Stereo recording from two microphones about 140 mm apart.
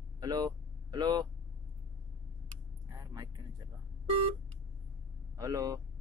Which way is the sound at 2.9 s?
25° right (ahead or behind).